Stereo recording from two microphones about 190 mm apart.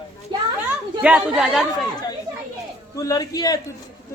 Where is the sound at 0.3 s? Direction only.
25° right (ahead or behind).